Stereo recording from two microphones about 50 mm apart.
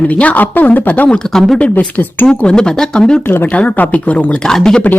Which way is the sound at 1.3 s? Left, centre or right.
Centre.